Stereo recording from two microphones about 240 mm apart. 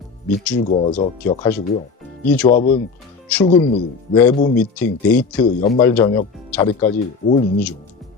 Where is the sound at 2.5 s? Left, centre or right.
Left.